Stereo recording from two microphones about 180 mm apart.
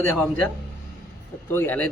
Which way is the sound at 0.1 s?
5° left (ahead or behind).